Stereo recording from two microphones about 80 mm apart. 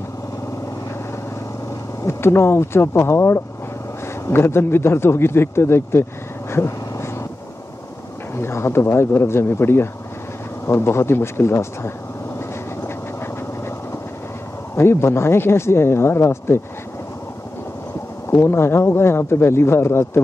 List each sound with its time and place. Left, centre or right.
2.0 s speech: left
6.5 s a sound: left
8.4 s speech: left
14.8 s speech: left
18.3 s speech: left